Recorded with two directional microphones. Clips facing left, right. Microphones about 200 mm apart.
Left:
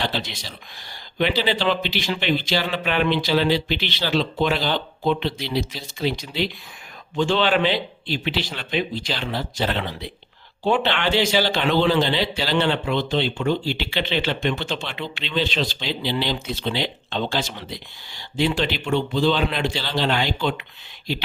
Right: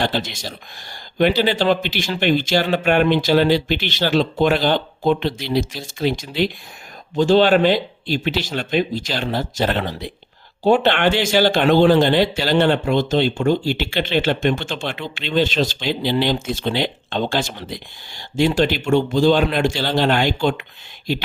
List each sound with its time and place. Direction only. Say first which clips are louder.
0.0 s speech: right 5 dB; 50° right (ahead or behind)